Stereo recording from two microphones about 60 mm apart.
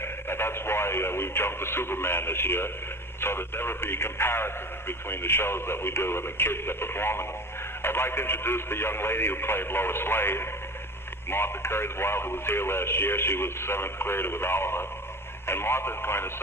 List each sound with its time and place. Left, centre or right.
0.0 s speech: left